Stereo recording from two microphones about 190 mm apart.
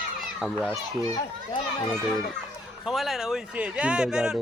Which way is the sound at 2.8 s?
Centre (ahead or behind).